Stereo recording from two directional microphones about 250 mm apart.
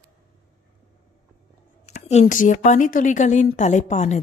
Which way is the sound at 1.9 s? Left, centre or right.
Left.